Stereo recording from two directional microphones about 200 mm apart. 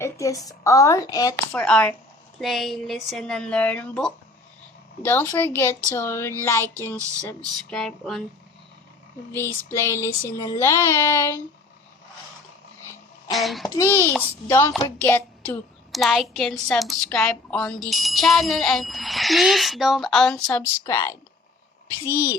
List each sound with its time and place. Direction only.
0.0 s speech: 15° left (ahead or behind)
1.6 s a child's voice: 5° left (ahead or behind)
9.7 s speech: 15° left (ahead or behind)
13.3 s a child's voice: centre (ahead or behind)
13.7 s a child's voice: 15° left (ahead or behind)